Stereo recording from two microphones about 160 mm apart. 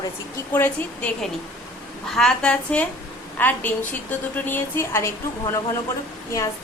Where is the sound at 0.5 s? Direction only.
15° left (ahead or behind).